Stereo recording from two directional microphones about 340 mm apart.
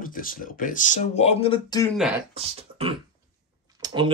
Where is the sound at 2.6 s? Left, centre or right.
Centre.